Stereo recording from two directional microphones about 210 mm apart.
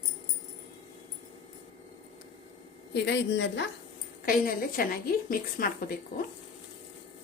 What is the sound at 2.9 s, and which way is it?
Speech, 55° left (ahead or behind).